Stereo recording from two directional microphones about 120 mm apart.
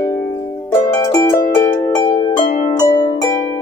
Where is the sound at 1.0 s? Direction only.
25° left (ahead or behind).